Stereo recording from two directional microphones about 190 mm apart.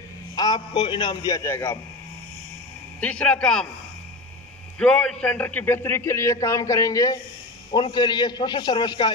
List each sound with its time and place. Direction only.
0.4 s a man's voice: 20° left (ahead or behind)
3.0 s a man's voice: 5° left (ahead or behind)
4.7 s a man's voice: 5° left (ahead or behind); by 9.1 s 25° left (ahead or behind)